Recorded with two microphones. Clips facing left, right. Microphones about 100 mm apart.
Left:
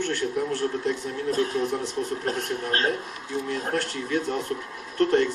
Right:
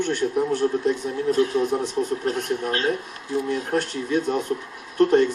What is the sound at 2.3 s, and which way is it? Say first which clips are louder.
Speech: right 3 dB; 40° left (ahead or behind).